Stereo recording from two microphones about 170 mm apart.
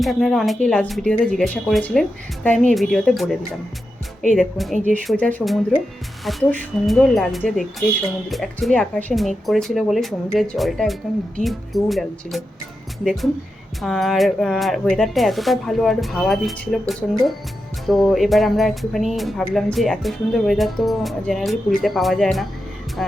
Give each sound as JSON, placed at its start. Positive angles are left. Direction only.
{"t": 0.0, "sound": "speech", "side_deg": 0}
{"t": 4.4, "sound": "speech", "side_deg": 0}
{"t": 13.8, "sound": "speech", "side_deg": 0}